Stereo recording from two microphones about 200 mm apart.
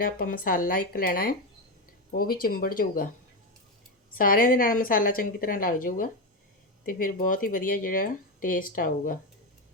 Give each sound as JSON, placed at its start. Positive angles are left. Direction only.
{"t": 0.0, "sound": "speech", "side_deg": 45}
{"t": 4.1, "sound": "speech", "side_deg": 45}